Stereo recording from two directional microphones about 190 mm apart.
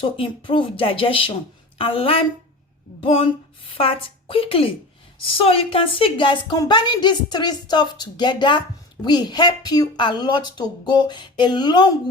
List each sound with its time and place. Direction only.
0.0 s a woman's voice: 30° left (ahead or behind)